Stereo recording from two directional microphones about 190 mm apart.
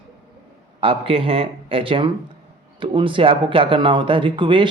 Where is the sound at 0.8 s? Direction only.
30° right (ahead or behind).